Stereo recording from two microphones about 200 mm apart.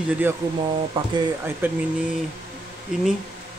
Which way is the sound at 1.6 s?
10° right (ahead or behind).